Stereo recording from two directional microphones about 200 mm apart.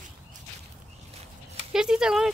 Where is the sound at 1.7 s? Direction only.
5° right (ahead or behind).